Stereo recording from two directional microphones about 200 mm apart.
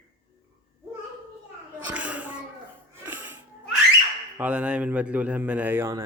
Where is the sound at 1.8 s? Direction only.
5° right (ahead or behind).